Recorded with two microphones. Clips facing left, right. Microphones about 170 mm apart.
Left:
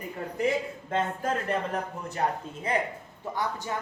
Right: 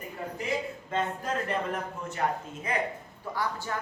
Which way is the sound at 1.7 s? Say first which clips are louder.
Left 2 dB; 35° left (ahead or behind).